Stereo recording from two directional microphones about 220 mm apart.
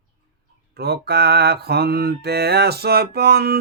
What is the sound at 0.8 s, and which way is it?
Mantra, 45° right (ahead or behind).